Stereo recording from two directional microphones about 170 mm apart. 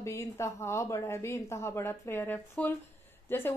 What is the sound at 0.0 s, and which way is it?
A woman's voice, 15° left (ahead or behind).